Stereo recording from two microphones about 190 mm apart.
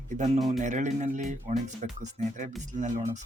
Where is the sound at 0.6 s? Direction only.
40° right (ahead or behind).